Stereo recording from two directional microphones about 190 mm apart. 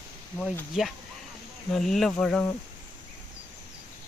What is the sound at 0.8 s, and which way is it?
Speech, centre (ahead or behind).